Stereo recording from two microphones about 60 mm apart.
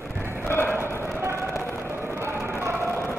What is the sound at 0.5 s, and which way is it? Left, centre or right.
Music, left.